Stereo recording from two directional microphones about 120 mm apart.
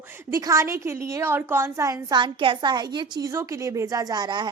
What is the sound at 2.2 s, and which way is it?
A woman's voice, 40° right (ahead or behind).